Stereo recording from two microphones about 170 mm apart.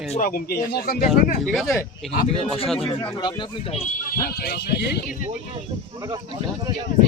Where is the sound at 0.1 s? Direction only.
55° left (ahead or behind).